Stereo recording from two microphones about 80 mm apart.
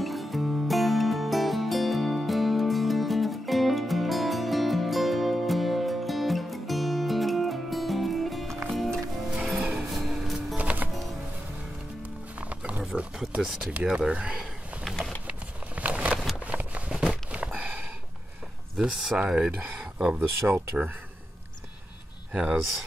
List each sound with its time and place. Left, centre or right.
0.0 s music: centre
9.4 s music: centre
9.9 s music: centre
10.6 s music: centre
12.0 s music: centre
12.8 s a sound: centre
14.9 s a sound: centre
15.2 s a sound: centre
18.8 s speech: centre
19.8 s a sound: centre
20.4 s speech: right
22.3 s speech: centre